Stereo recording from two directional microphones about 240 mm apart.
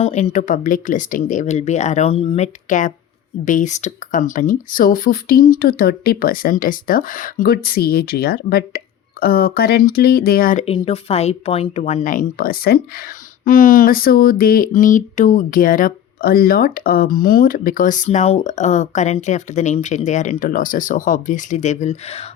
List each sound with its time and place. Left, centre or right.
0.0 s speech: left